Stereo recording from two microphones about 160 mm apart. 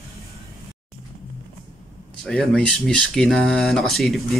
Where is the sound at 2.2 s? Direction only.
5° left (ahead or behind).